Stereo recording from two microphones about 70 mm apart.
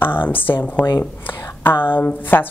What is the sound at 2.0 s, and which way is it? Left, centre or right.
Speech, left.